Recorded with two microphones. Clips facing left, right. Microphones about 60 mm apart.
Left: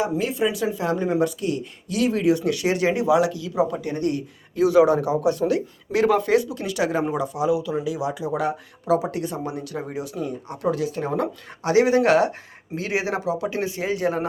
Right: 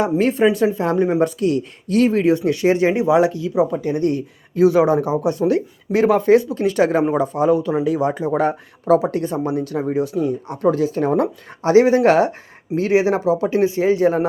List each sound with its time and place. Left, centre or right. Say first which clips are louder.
0.0 s speech: right 7 dB; right
1.4 s speech: right 7 dB; right
4.0 s speech: right 5 dB; right